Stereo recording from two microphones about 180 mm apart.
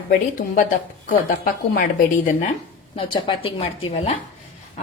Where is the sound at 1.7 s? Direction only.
50° left (ahead or behind).